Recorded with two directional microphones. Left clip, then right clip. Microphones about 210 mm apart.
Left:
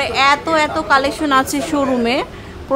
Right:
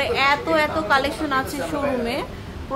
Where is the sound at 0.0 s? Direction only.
25° left (ahead or behind).